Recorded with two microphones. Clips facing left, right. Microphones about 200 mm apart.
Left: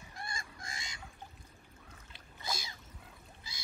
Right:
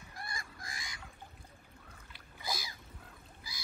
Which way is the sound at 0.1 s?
25° left (ahead or behind).